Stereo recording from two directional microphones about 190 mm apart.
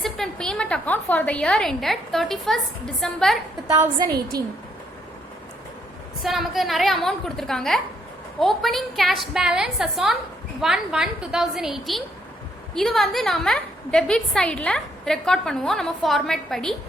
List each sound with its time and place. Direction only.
0.0 s a sound: 5° left (ahead or behind)
1.1 s a woman's voice: 5° left (ahead or behind)
3.7 s a woman's voice: 20° right (ahead or behind)
6.2 s a woman's voice: centre (ahead or behind)